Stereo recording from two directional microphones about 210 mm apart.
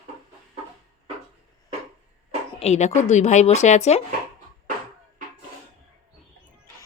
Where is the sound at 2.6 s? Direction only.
30° left (ahead or behind).